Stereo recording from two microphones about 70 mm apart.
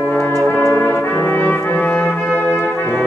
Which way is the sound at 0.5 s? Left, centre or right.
Left.